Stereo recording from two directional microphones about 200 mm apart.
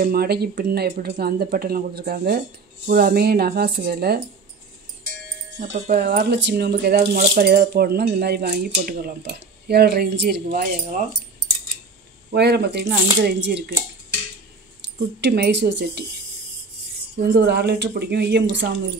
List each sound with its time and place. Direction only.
0.0 s speech: 50° right (ahead or behind)
5.9 s speech: 55° right (ahead or behind)
12.4 s speech: 55° right (ahead or behind)
14.8 s speech: 55° right (ahead or behind)
17.2 s speech: 55° right (ahead or behind)